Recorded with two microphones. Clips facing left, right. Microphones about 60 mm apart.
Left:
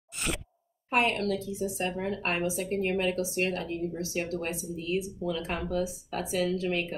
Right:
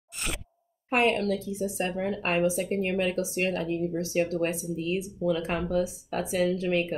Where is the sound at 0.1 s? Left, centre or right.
Centre.